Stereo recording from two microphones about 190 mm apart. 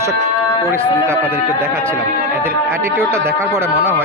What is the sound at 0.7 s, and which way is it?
Speech, 10° right (ahead or behind).